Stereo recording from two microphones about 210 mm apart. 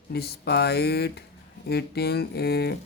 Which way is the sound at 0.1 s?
50° left (ahead or behind).